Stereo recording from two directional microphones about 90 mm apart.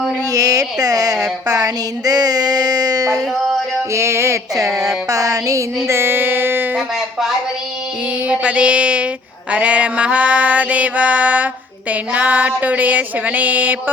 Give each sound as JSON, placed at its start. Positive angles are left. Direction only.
{"t": 0.3, "sound": "speech", "side_deg": -40}
{"t": 3.9, "sound": "speech", "side_deg": -30}
{"t": 5.0, "sound": "a sound", "side_deg": -40}
{"t": 8.3, "sound": "music", "side_deg": -15}